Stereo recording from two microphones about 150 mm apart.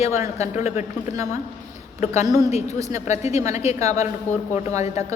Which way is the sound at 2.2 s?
25° right (ahead or behind).